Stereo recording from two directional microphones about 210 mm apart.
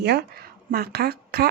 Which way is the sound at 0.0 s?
50° right (ahead or behind).